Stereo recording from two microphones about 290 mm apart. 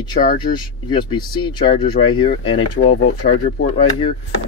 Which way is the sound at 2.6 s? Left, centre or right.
Left.